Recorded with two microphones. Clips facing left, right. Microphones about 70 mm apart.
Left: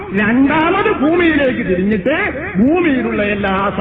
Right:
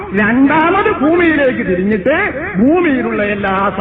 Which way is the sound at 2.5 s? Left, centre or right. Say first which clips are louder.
Right 2 dB; centre.